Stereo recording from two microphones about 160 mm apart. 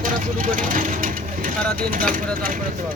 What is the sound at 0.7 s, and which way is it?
Vehicle, 55° right (ahead or behind).